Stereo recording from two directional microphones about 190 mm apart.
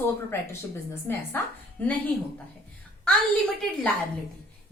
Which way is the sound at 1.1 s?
10° left (ahead or behind).